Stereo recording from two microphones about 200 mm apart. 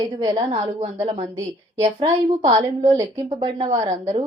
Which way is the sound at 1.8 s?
30° right (ahead or behind).